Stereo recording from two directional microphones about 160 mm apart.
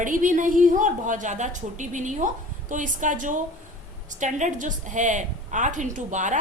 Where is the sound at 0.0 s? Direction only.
55° right (ahead or behind).